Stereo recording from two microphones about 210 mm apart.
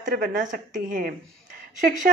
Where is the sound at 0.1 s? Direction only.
40° right (ahead or behind).